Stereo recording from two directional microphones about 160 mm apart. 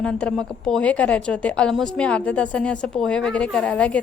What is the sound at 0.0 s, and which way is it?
A woman's voice, 5° left (ahead or behind).